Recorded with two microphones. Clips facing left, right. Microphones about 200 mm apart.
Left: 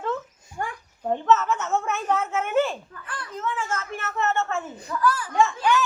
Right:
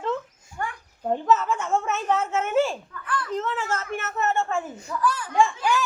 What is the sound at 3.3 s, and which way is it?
Speech, 70° right (ahead or behind).